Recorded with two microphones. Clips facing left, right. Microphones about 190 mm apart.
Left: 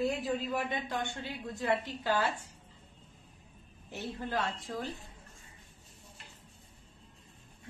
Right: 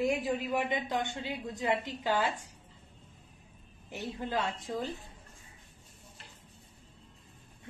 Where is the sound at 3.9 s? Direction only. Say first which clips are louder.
Right 1 dB; 15° right (ahead or behind).